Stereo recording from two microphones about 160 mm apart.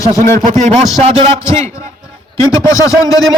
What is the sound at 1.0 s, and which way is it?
Speech, 40° right (ahead or behind).